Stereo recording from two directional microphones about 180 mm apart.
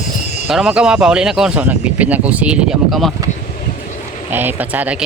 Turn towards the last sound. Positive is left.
turn(degrees=-10)  # may be behind; listen again after turning